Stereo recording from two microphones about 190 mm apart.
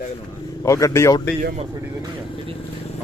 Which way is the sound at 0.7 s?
15° left (ahead or behind).